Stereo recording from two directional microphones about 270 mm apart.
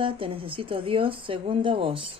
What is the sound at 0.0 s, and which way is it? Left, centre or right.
Speech, centre.